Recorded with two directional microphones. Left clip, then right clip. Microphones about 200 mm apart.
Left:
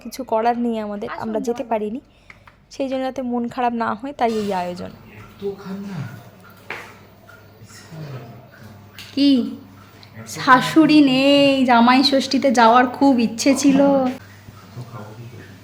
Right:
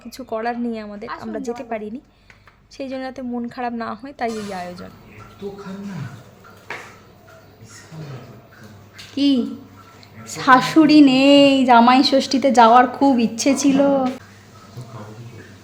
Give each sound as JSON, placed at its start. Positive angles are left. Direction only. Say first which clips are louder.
{"t": 0.0, "sound": "a woman's voice", "louder": "left 6 dB", "side_deg": 15}
{"t": 1.0, "sound": "speech", "louder": "left 3 dB", "side_deg": 0}
{"t": 1.3, "sound": "a woman's voice", "louder": "left 6 dB", "side_deg": 15}
{"t": 9.1, "sound": "speech", "louder": "left 2 dB", "side_deg": 5}
{"t": 10.2, "sound": "a woman's voice", "louder": "right 1 dB", "side_deg": -5}